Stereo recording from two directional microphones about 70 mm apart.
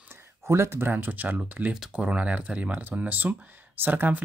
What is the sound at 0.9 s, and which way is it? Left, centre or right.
Speech, right.